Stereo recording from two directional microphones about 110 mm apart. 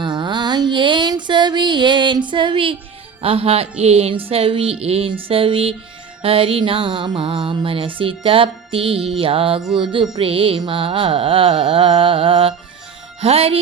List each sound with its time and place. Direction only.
0.0 s a sound: 45° right (ahead or behind)
3.2 s music: 60° right (ahead or behind)
4.1 s music: 60° right (ahead or behind)
6.2 s speech: 55° right (ahead or behind)
9.2 s music: 55° right (ahead or behind)
9.7 s speech: 50° right (ahead or behind)
10.2 s music: 55° right (ahead or behind)
10.7 s speech: 50° right (ahead or behind)
13.2 s music: 65° right (ahead or behind)